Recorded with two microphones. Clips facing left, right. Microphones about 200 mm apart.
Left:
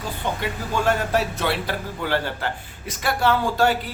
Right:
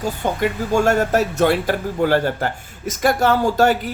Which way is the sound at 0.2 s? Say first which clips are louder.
Right 7 dB; 45° right (ahead or behind).